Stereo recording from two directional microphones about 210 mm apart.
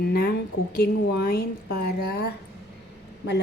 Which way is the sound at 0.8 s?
50° left (ahead or behind).